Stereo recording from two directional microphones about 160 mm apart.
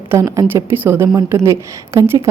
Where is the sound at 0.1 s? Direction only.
20° right (ahead or behind).